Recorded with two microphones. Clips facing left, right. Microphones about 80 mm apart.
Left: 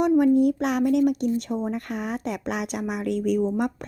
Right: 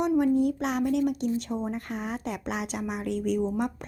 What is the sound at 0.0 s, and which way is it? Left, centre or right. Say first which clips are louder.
A woman's voice: left 5 dB; left.